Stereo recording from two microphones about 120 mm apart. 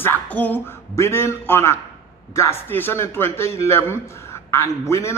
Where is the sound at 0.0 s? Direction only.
15° left (ahead or behind).